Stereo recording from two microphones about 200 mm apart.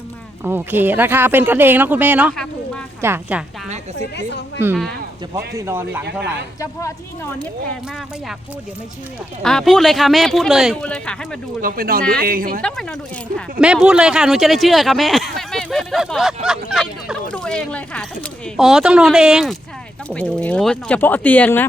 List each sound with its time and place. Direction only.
0.4 s speech: 10° right (ahead or behind)
2.3 s a sound: 5° left (ahead or behind)
3.0 s speech: 10° right (ahead or behind)
4.3 s speech: 60° left (ahead or behind)
5.5 s speech: 10° right (ahead or behind)
6.6 s speech: 15° left (ahead or behind)
9.4 s speech: 5° left (ahead or behind)
11.6 s speech: 45° right (ahead or behind)
12.6 s speech: 5° left (ahead or behind)